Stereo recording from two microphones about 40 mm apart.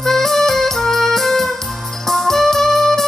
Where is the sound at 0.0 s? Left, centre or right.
Centre.